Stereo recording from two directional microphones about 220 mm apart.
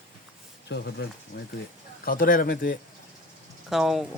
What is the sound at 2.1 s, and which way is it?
Speech, 40° left (ahead or behind).